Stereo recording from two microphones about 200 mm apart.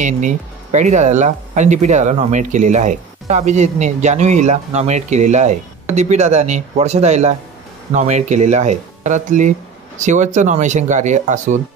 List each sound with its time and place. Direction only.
0.0 s speech: 35° right (ahead or behind)